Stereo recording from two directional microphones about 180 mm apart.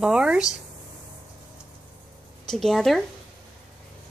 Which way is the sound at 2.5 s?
Centre (ahead or behind).